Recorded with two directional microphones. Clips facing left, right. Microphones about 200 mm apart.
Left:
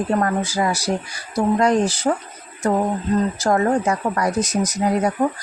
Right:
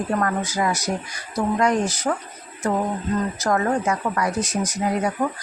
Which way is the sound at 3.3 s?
30° left (ahead or behind).